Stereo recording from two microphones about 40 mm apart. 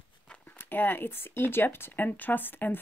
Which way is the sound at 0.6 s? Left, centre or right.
Left.